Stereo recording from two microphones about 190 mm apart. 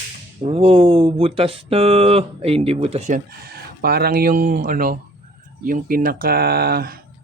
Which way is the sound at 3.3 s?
55° right (ahead or behind).